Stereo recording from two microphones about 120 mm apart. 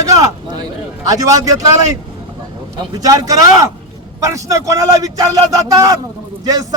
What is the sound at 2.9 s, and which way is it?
A man's voice, 30° right (ahead or behind).